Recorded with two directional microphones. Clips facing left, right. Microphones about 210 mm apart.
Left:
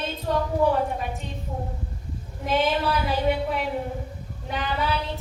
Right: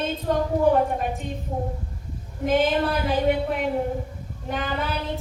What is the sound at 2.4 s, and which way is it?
A woman's voice, 50° right (ahead or behind).